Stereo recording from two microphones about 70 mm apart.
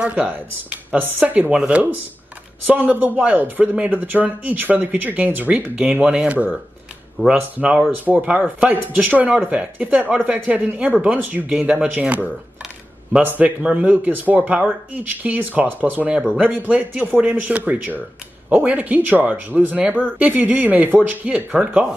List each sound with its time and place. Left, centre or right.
0.0 s a man's voice: centre